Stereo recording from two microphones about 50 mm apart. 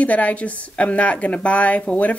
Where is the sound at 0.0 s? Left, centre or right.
Left.